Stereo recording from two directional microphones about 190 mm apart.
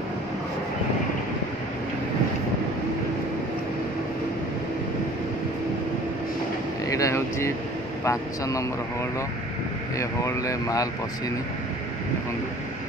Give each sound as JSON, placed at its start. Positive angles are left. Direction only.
{"t": 6.9, "sound": "vehicle", "side_deg": 15}
{"t": 8.0, "sound": "speech", "side_deg": 15}
{"t": 9.9, "sound": "speech", "side_deg": 15}